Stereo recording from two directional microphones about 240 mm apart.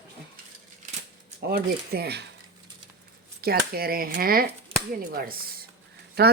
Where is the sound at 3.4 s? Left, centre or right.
Right.